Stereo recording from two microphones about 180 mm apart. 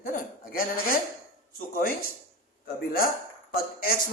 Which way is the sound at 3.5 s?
55° left (ahead or behind).